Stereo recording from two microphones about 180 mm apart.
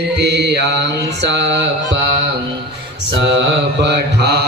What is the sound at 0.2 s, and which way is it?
Mantra, 65° right (ahead or behind).